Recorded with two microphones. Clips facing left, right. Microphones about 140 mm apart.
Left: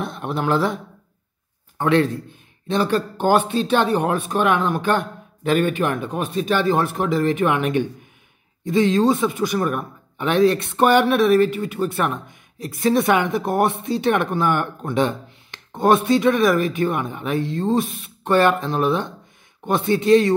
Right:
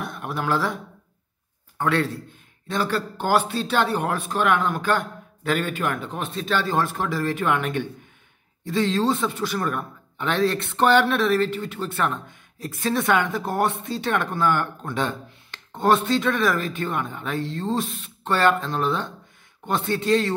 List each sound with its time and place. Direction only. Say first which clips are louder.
0.0 s speech: left 4 dB; 25° left (ahead or behind)
1.8 s a man's voice: left 5 dB; 20° left (ahead or behind)